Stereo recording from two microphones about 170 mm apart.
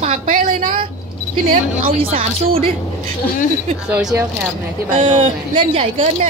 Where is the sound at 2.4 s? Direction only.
35° right (ahead or behind).